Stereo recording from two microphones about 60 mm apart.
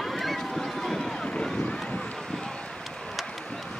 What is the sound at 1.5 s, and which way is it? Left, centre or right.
Boat, centre.